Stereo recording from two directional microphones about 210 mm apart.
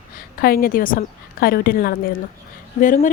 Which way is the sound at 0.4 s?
45° left (ahead or behind).